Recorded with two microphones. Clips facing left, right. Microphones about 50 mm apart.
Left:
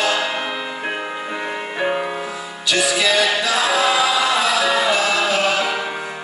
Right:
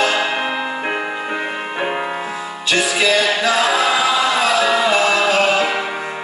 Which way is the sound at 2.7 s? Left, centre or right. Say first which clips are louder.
Right 2 dB; right.